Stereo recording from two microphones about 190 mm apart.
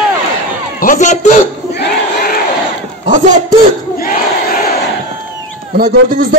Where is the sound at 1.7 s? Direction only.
60° left (ahead or behind).